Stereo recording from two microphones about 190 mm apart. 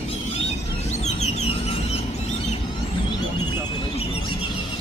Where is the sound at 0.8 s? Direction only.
35° left (ahead or behind).